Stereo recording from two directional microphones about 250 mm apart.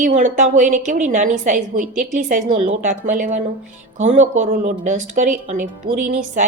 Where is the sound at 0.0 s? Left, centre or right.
Right.